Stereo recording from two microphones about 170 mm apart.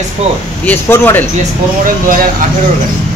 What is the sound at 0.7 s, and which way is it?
Speech, 15° left (ahead or behind).